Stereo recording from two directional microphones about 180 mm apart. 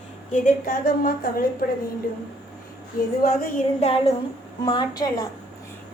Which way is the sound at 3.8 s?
35° left (ahead or behind).